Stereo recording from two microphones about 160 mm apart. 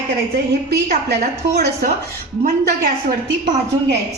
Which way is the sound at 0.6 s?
85° right.